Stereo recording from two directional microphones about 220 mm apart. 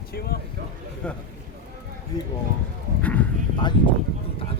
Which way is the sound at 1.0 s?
5° left (ahead or behind).